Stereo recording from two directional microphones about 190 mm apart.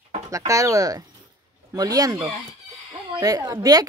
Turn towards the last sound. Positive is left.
turn(degrees=-20)  # may be behind; listen again after turning